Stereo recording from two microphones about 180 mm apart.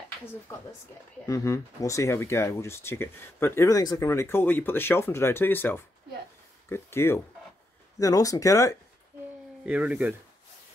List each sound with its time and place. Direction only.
1.2 s speech: 15° left (ahead or behind)
9.7 s speech: 5° right (ahead or behind)